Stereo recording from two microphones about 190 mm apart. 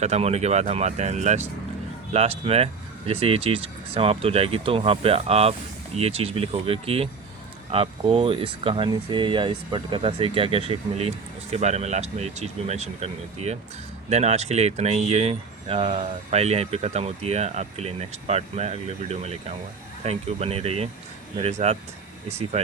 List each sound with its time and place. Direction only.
0.0 s speech: 35° right (ahead or behind)